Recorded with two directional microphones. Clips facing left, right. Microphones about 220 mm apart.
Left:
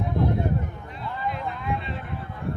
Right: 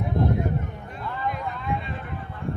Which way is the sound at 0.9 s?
50° right (ahead or behind).